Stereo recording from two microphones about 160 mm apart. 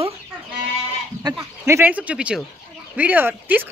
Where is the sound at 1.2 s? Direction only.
20° right (ahead or behind).